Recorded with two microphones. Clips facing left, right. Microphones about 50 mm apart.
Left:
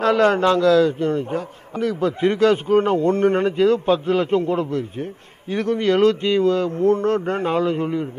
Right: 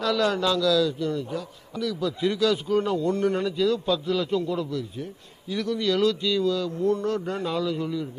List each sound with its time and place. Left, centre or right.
0.0 s a man's voice: left